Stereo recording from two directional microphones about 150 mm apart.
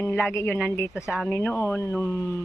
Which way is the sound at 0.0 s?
15° left (ahead or behind).